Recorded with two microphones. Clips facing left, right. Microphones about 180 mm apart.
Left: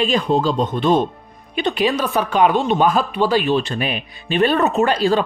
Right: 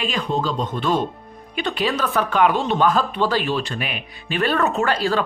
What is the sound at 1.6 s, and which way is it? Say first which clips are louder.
Speech: left 4 dB; 20° left (ahead or behind).